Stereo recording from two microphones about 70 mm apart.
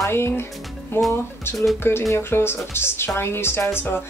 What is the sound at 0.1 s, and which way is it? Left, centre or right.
Speech, left.